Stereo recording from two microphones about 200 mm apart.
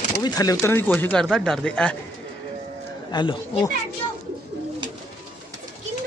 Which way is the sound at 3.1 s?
20° left (ahead or behind).